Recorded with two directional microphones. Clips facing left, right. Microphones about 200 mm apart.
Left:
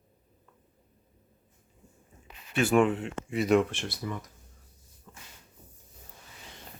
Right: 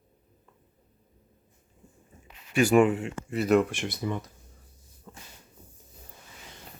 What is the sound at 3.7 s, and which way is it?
Speech, 15° right (ahead or behind).